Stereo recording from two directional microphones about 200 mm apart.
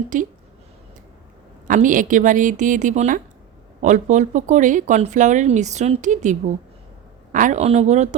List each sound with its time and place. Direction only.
0.1 s speech: 40° right (ahead or behind)
1.6 s speech: 40° right (ahead or behind)
7.3 s speech: 40° right (ahead or behind)